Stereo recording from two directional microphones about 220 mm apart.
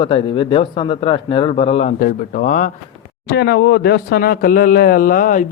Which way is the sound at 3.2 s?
50° left (ahead or behind).